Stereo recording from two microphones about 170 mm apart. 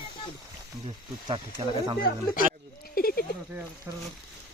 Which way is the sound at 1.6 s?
30° right (ahead or behind).